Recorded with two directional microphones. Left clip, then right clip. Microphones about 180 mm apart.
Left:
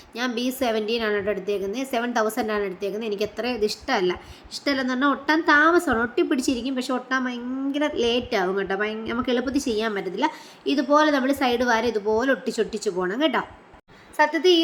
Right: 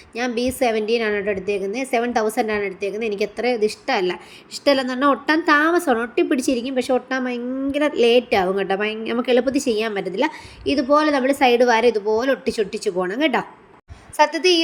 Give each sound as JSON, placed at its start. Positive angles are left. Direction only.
{"t": 0.1, "sound": "a woman's voice", "side_deg": -10}
{"t": 14.2, "sound": "a woman's voice", "side_deg": -40}